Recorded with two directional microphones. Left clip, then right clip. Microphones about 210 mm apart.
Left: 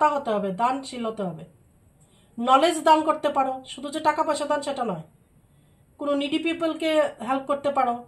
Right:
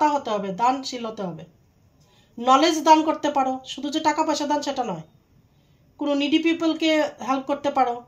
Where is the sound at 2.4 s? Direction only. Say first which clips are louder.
Right 1 dB; 35° right (ahead or behind).